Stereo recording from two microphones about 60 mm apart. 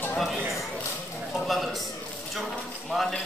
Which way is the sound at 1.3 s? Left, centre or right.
Centre.